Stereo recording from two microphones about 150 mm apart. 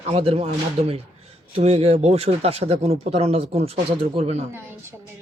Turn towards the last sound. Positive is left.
turn(degrees=-45)  # may be behind; listen again after turning